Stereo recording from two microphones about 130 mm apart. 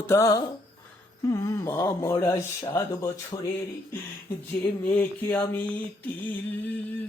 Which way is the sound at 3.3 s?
35° left (ahead or behind).